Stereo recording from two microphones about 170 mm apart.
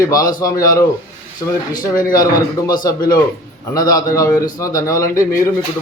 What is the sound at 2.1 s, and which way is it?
A man's voice, 20° left (ahead or behind).